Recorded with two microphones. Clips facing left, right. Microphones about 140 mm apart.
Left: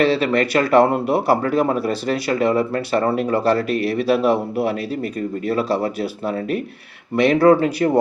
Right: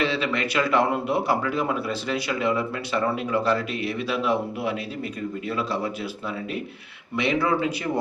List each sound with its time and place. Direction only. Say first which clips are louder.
0.0 s speech: left 8 dB; 40° left (ahead or behind)